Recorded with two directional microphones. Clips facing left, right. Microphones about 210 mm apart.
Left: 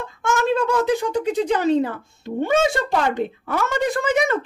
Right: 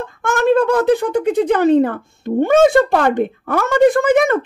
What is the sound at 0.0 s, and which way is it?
Speech, 55° right (ahead or behind).